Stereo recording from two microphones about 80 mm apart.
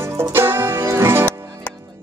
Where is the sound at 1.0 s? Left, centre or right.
Right.